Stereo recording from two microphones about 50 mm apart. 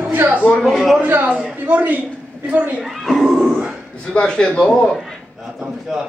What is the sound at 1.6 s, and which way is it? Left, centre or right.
A woman's voice, right.